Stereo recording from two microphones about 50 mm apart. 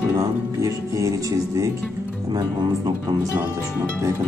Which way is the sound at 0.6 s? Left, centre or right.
Right.